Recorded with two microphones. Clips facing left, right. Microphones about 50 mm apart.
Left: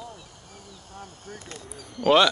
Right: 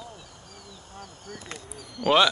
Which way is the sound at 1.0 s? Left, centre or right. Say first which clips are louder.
Even; left.